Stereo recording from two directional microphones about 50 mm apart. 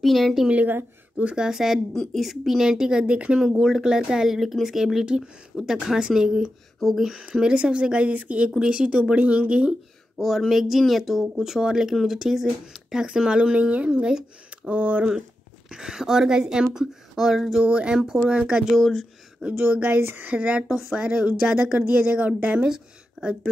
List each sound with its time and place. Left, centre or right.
0.0 s speech: centre
7.2 s speech: centre
10.1 s speech: centre; by 15.0 s right
15.7 s speech: centre
17.6 s speech: right
17.9 s speech: centre
18.8 s speech: centre
19.7 s speech: right
20.6 s speech: centre